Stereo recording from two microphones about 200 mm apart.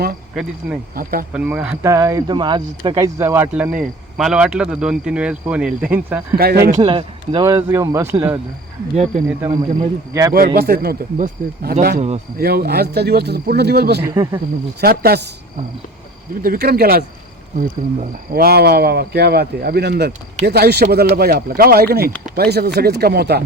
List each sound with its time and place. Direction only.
0.6 s speech: 5° right (ahead or behind)
6.3 s speech: 50° right (ahead or behind)
6.7 s a man's voice: 30° right (ahead or behind); by 8.4 s 10° right (ahead or behind)
9.4 s a man's voice: 15° right (ahead or behind)
10.3 s speech: 50° right (ahead or behind)
11.9 s speech: 30° right (ahead or behind)
12.4 s speech: 50° right (ahead or behind)
14.0 s a man's voice: 15° right (ahead or behind)
14.8 s speech: 50° right (ahead or behind)
16.4 s speech: 50° right (ahead or behind)
18.3 s speech: 50° right (ahead or behind)